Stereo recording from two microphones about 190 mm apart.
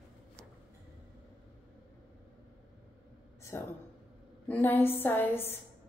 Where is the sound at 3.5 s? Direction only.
15° left (ahead or behind).